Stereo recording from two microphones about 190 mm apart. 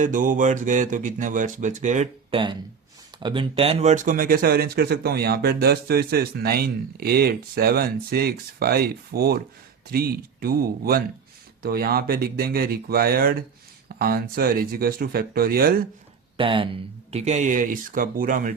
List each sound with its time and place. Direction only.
0.0 s speech: 40° right (ahead or behind)
3.2 s speech: 25° right (ahead or behind); by 15.7 s 50° right (ahead or behind)
16.4 s speech: 25° right (ahead or behind); by 18.5 s 45° right (ahead or behind)